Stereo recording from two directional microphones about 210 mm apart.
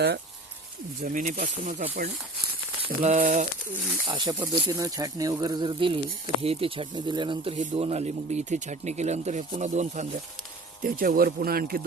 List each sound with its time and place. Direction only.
1.0 s speech: 40° right (ahead or behind)
4.0 s speech: 25° right (ahead or behind); by 11.8 s 45° right (ahead or behind)